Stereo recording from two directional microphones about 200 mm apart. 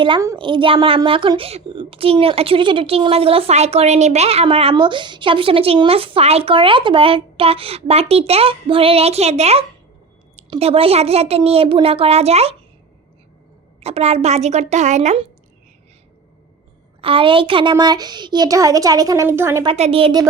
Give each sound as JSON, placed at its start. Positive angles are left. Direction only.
{"t": 0.0, "sound": "a woman's voice", "side_deg": -20}
{"t": 13.7, "sound": "a woman's voice", "side_deg": -30}
{"t": 17.0, "sound": "a woman's voice", "side_deg": -25}
{"t": 19.6, "sound": "a woman's voice", "side_deg": -30}